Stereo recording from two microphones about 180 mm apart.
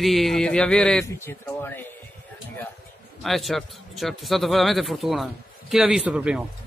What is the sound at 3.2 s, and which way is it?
A man's voice, centre (ahead or behind).